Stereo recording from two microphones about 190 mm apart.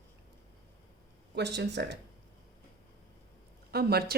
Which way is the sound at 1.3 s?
65° right (ahead or behind).